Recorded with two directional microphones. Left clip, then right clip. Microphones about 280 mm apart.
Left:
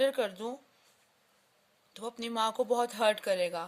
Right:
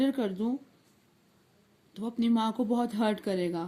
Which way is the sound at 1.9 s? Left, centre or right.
Left.